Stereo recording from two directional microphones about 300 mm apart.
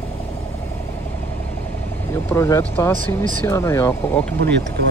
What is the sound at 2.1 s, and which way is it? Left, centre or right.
Speech, centre.